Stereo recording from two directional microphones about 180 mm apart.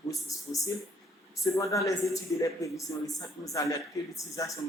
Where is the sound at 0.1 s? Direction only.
20° left (ahead or behind).